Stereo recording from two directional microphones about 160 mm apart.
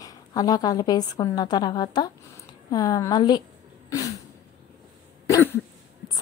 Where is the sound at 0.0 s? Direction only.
25° left (ahead or behind).